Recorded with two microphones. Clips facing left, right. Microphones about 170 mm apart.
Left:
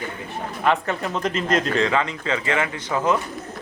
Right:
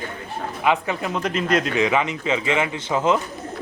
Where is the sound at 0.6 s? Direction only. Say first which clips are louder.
Even; 10° right (ahead or behind).